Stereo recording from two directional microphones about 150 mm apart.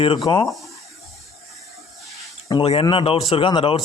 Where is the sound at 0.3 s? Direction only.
35° left (ahead or behind).